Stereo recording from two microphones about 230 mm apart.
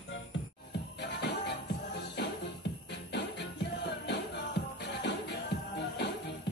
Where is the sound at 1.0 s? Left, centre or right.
Left.